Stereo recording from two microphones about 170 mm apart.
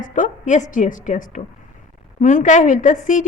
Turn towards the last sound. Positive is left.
turn(degrees=50)  # may be behind; listen again after turning